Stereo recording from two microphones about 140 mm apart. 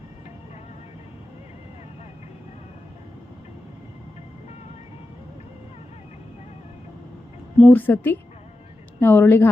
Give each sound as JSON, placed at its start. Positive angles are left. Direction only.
{"t": 7.6, "sound": "a woman's voice", "side_deg": 10}